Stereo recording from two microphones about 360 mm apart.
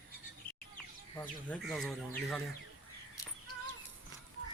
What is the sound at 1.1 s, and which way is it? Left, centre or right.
Speech, centre.